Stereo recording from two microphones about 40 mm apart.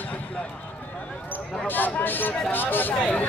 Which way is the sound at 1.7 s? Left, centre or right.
Left.